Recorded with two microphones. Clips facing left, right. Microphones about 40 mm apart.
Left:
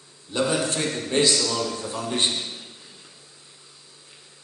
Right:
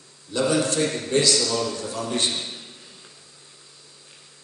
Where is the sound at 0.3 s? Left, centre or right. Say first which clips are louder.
Right 2 dB; left.